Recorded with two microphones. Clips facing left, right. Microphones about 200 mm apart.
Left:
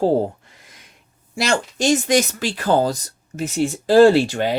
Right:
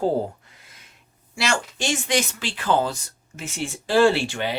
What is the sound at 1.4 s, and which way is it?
Speech, 40° left (ahead or behind).